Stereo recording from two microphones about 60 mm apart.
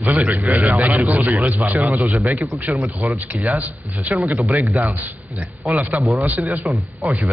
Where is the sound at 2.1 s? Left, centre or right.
Right.